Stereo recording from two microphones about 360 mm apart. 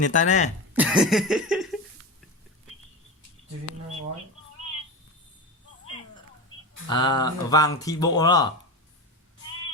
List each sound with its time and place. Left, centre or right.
0.0 s speech: left
0.8 s a sound: centre
6.8 s speech: centre